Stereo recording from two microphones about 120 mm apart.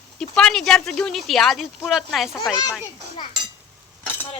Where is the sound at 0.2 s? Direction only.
5° left (ahead or behind).